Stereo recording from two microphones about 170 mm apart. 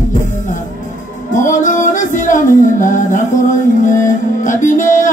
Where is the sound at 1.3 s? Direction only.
50° left (ahead or behind).